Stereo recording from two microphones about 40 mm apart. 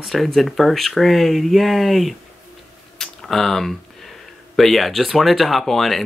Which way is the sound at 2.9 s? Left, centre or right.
Centre.